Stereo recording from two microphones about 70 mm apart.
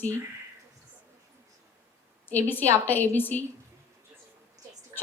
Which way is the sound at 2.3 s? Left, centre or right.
Left.